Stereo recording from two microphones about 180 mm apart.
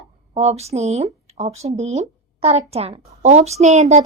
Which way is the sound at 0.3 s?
35° right (ahead or behind).